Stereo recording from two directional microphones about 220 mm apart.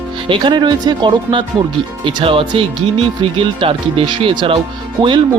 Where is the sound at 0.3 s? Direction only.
20° right (ahead or behind).